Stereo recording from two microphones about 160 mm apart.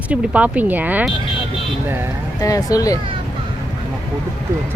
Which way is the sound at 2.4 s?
20° left (ahead or behind).